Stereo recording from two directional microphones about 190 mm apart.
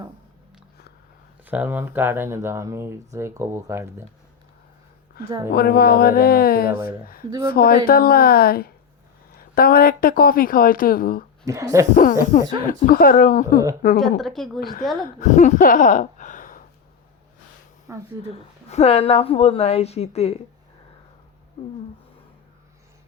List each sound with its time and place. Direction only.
1.5 s speech: 10° right (ahead or behind)
5.2 s speech: 55° left (ahead or behind)
11.4 s speech: 15° right (ahead or behind)
11.9 s speech: 45° left (ahead or behind)
14.2 s speech: centre (ahead or behind)
15.2 s a sound: 40° left (ahead or behind)
17.9 s speech: 15° right (ahead or behind)
18.7 s a woman's voice: 35° left (ahead or behind)